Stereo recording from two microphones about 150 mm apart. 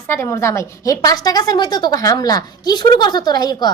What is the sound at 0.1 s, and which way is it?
A woman's voice, 20° left (ahead or behind).